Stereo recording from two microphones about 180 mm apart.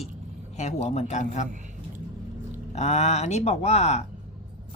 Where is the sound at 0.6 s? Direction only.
35° left (ahead or behind).